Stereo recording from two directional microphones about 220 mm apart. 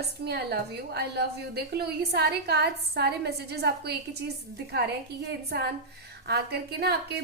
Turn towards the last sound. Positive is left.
turn(degrees=-45)  # may be behind; listen again after turning